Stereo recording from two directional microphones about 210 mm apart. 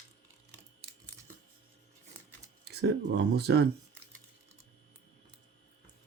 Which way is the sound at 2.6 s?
50° right (ahead or behind).